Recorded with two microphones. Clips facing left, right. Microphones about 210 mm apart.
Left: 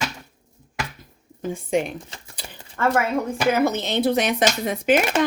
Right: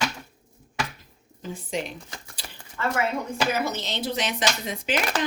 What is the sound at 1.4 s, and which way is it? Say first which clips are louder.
Speech: left 8 dB; 50° left (ahead or behind).